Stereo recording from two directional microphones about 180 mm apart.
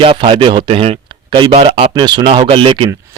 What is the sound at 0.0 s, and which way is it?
A man's voice, 30° right (ahead or behind).